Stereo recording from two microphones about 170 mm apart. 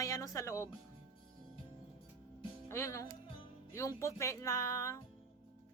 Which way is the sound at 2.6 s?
15° left (ahead or behind).